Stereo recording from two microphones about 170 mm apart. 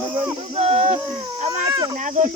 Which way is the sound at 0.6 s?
40° right (ahead or behind).